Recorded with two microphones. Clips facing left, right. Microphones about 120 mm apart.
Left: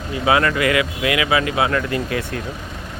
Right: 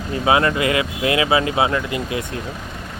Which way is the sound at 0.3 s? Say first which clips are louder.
Even; 25° right (ahead or behind).